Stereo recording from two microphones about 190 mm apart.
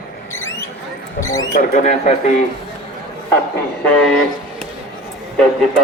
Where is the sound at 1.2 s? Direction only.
15° left (ahead or behind).